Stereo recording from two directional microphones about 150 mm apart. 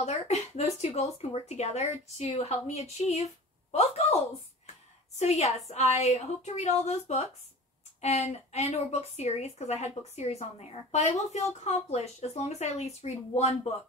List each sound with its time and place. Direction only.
0.0 s a woman's voice: 45° left (ahead or behind)
5.2 s a woman's voice: 45° left (ahead or behind)